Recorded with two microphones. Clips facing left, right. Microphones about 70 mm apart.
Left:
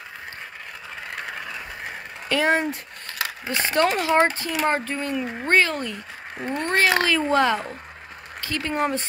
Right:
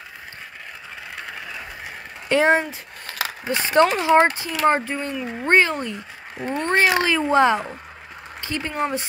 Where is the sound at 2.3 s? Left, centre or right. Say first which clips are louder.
Right 3 dB; right.